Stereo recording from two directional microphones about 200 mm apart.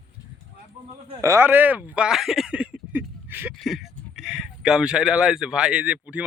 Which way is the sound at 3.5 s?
Centre (ahead or behind).